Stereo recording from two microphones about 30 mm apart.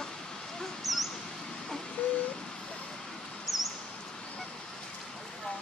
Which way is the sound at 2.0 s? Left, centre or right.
Left.